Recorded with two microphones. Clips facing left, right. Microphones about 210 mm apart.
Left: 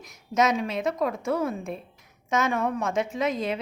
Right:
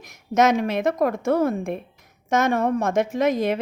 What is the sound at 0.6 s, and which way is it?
A woman's voice, 45° right (ahead or behind).